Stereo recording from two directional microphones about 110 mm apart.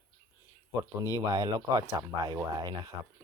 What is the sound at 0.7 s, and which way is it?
Speech, 30° right (ahead or behind).